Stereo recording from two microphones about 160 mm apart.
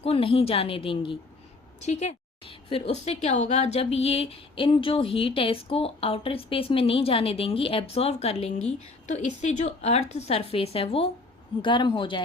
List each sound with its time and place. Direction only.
0.0 s a woman's voice: 35° left (ahead or behind)